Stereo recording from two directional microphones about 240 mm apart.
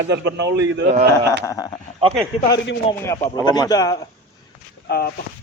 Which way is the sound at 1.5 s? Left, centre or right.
Centre.